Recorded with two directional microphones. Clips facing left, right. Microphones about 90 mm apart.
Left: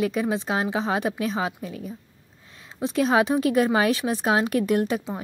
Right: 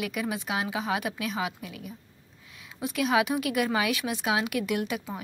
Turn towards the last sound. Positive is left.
turn(degrees=30)  # may be behind; listen again after turning